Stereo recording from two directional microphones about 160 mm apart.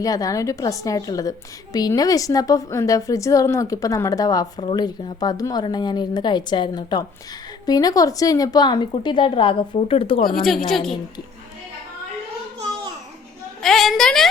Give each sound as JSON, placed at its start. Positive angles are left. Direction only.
{"t": 0.0, "sound": "a woman's voice", "side_deg": 20}
{"t": 13.6, "sound": "a woman's voice", "side_deg": 0}